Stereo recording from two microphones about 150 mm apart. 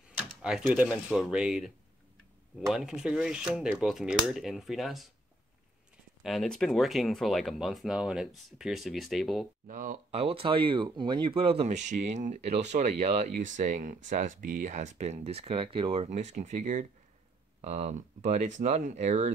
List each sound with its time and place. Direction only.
0.4 s speech: 5° right (ahead or behind)
6.2 s speech: centre (ahead or behind)
9.7 s speech: 65° right (ahead or behind)
10.1 s speech: 40° right (ahead or behind)